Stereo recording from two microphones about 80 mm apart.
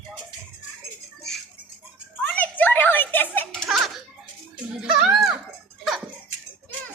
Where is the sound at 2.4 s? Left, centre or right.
Left.